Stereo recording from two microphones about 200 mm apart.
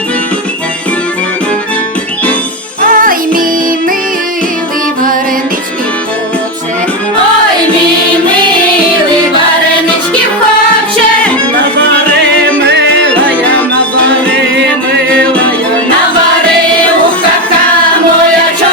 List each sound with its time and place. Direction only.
2.8 s music: 45° right (ahead or behind)
12.6 s music: 60° right (ahead or behind)
14.5 s music: 60° right (ahead or behind)